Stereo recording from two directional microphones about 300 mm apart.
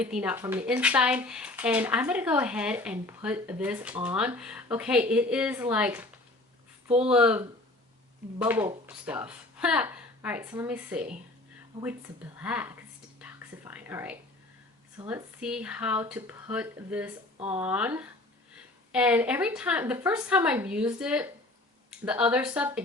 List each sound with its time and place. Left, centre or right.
0.0 s speech: centre
6.8 s speech: centre
7.1 s speech: centre
12.4 s whispering: centre
14.9 s speech: centre
17.3 s speech: centre
17.6 s speech: centre